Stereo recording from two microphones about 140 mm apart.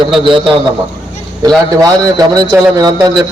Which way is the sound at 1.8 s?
25° right (ahead or behind).